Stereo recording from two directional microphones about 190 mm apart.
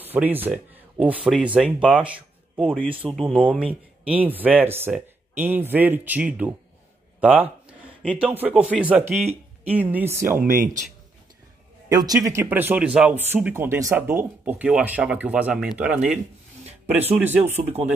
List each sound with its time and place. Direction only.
0.0 s speech: 10° right (ahead or behind)
10.4 s speech: 45° right (ahead or behind)
11.9 s speech: 20° right (ahead or behind)
17.2 s speech: 10° right (ahead or behind)